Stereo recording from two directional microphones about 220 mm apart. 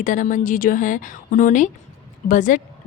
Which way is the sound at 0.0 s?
35° left (ahead or behind).